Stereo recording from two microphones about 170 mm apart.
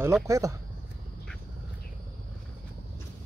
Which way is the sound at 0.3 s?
15° right (ahead or behind).